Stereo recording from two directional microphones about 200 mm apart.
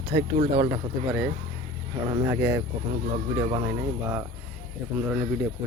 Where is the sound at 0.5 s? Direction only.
20° right (ahead or behind).